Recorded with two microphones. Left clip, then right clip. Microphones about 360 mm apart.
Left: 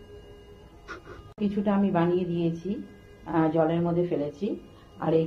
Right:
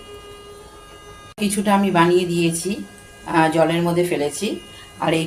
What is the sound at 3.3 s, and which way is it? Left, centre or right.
Speech, left.